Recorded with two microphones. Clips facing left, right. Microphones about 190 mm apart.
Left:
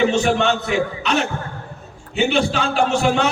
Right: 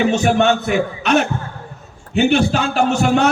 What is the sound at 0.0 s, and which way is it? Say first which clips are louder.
A man's voice: right 2 dB; 50° right (ahead or behind).